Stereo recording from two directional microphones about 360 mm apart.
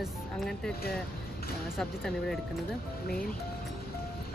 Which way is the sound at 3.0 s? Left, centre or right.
Left.